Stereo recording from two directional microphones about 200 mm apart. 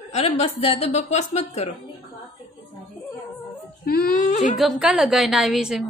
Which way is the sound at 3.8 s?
45° left (ahead or behind).